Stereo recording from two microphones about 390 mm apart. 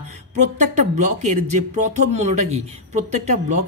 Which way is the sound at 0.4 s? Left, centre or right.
Centre.